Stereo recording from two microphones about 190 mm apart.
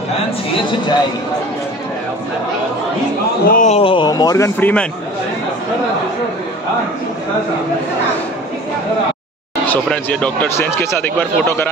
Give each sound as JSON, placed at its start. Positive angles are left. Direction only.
{"t": 3.4, "sound": "speech", "side_deg": 45}
{"t": 3.7, "sound": "speech", "side_deg": 25}
{"t": 9.7, "sound": "speech", "side_deg": 5}